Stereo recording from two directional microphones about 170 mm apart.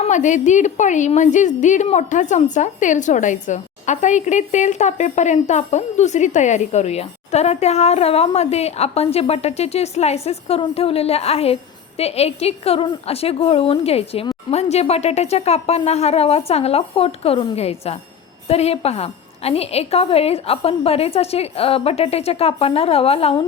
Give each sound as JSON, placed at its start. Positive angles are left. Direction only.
{"t": 0.0, "sound": "a woman's voice", "side_deg": 45}